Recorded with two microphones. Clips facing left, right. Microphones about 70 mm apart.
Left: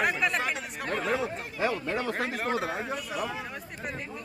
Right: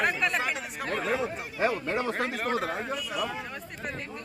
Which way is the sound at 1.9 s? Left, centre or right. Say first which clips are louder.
Right 1 dB; right.